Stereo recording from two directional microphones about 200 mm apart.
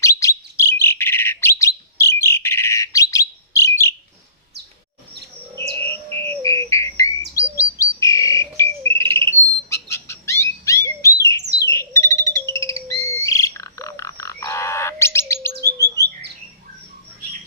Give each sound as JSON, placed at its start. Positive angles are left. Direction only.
{"t": 0.0, "sound": "bird", "side_deg": 15}
{"t": 5.5, "sound": "bird", "side_deg": 10}
{"t": 6.4, "sound": "a sound", "side_deg": 15}
{"t": 7.8, "sound": "bird", "side_deg": 15}
{"t": 15.6, "sound": "bird", "side_deg": -15}